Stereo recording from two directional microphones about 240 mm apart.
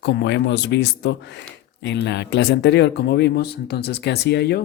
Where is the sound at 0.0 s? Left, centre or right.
Left.